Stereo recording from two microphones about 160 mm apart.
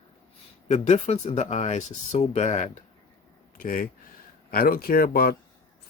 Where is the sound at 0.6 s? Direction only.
45° left (ahead or behind).